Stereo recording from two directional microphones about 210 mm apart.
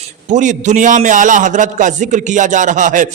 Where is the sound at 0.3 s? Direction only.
35° right (ahead or behind).